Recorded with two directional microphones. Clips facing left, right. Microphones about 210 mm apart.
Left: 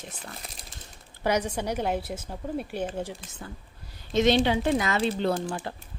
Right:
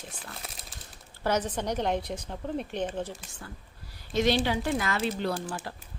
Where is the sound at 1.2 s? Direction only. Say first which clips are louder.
Left 2 dB; 10° left (ahead or behind).